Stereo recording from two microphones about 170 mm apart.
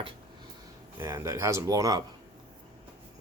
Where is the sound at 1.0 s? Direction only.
15° right (ahead or behind).